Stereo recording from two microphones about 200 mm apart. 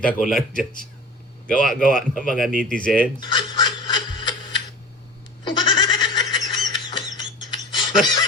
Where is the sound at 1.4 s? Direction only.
5° left (ahead or behind).